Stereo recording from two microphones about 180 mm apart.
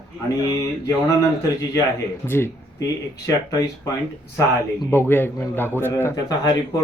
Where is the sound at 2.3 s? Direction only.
15° left (ahead or behind).